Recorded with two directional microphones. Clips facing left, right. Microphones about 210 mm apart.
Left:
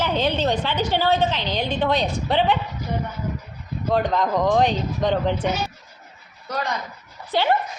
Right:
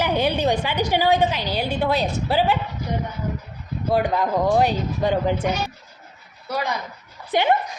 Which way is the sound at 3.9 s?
10° right (ahead or behind).